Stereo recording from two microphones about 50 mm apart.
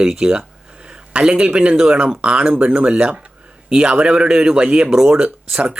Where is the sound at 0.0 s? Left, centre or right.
Centre.